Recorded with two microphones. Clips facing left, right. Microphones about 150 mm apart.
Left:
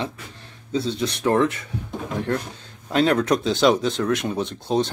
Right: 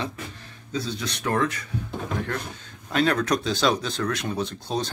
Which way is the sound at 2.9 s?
25° left (ahead or behind).